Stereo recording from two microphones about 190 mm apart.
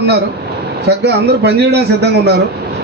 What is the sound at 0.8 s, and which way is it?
A man's voice, 60° right (ahead or behind).